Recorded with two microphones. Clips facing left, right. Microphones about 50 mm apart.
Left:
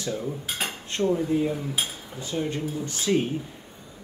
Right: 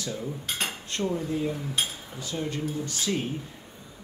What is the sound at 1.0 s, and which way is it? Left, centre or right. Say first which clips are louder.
Speech: left 5 dB; centre.